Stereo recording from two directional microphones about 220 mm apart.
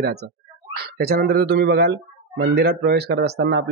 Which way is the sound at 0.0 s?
45° right (ahead or behind).